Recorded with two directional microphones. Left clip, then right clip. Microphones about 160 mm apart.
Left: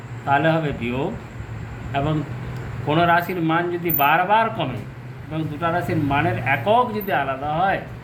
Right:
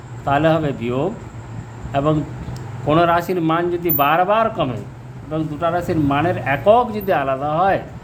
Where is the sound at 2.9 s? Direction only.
90° right.